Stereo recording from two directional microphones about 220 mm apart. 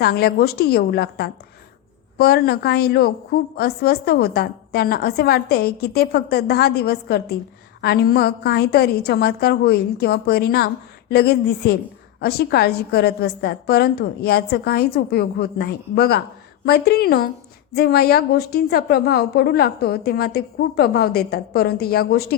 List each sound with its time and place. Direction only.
0.0 s a woman's voice: 45° left (ahead or behind)